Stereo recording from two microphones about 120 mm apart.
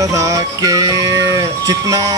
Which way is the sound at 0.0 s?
25° right (ahead or behind).